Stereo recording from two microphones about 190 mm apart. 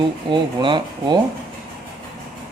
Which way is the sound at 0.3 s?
25° right (ahead or behind).